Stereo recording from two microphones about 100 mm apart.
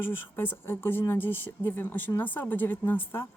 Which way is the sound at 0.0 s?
20° left (ahead or behind).